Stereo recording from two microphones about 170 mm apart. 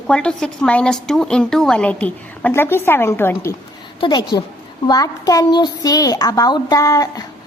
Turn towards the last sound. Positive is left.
turn(degrees=20)  # may be behind; listen again after turning